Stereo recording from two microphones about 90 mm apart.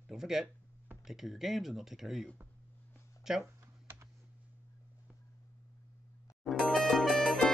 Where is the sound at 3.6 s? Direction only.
30° right (ahead or behind).